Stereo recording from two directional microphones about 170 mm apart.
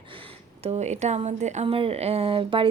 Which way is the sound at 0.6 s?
40° right (ahead or behind).